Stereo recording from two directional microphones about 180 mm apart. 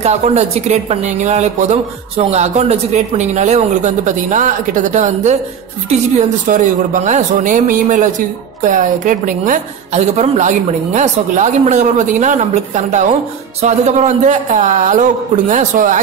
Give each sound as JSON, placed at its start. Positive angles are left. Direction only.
{"t": 0.0, "sound": "a woman's voice", "side_deg": -40}